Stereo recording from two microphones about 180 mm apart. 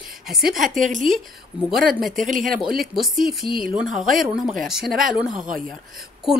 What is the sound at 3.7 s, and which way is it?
A woman's voice, centre (ahead or behind).